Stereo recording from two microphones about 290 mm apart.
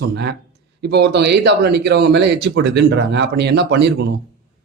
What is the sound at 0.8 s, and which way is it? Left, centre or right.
Speech, right.